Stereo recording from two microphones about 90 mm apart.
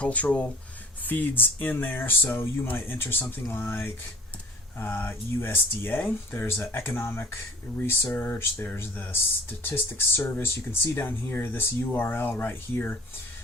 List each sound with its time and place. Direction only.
0.0 s speech: 15° left (ahead or behind)